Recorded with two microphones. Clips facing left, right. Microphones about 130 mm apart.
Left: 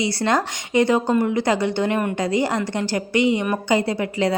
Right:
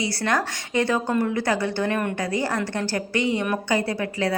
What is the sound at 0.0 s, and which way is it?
A woman's voice, 20° left (ahead or behind).